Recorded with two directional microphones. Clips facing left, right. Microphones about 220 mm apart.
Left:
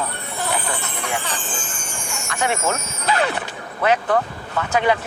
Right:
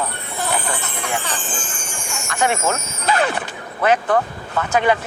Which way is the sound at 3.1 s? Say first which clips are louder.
Right 2 dB; 50° right (ahead or behind).